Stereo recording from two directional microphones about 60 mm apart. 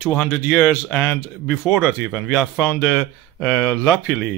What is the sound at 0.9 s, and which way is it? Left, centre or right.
Speech, centre.